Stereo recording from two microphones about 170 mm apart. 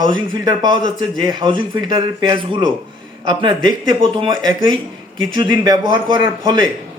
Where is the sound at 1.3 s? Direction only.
25° right (ahead or behind).